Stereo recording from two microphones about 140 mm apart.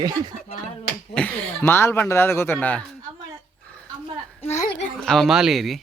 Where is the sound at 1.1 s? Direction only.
5° left (ahead or behind).